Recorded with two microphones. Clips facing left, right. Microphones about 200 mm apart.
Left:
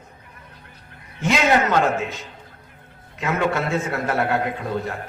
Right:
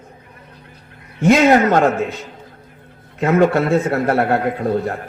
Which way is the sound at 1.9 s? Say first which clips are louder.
Right 5 dB; 55° right (ahead or behind).